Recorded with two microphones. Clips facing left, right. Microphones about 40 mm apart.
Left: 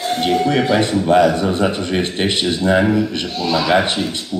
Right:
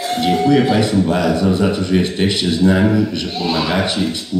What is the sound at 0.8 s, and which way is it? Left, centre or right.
A man's voice, left.